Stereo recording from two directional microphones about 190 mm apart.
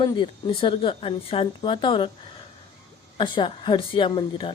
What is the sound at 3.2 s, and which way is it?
A woman's voice, 25° left (ahead or behind).